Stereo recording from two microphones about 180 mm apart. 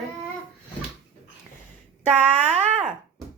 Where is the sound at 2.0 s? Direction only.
40° right (ahead or behind).